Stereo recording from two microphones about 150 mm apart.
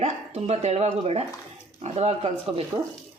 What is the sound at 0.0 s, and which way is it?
Speech, 45° right (ahead or behind).